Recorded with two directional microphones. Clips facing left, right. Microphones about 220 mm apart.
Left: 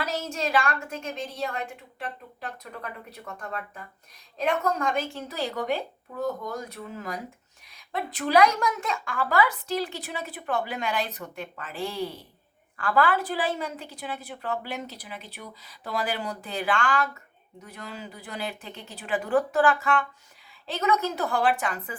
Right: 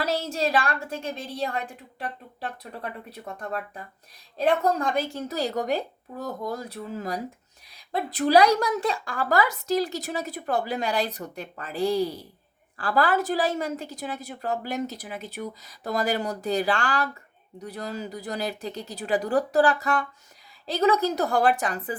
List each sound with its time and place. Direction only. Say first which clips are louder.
0.0 s a woman's voice: right 4 dB; 35° right (ahead or behind)